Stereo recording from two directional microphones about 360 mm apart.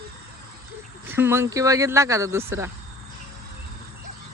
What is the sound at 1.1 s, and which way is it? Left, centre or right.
Speech, centre.